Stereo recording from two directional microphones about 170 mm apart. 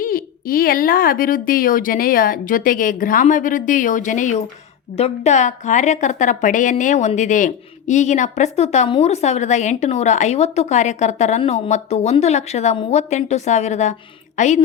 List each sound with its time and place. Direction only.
0.0 s a woman's voice: 55° left (ahead or behind)